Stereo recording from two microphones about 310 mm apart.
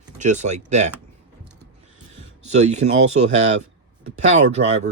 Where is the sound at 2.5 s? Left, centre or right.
Right.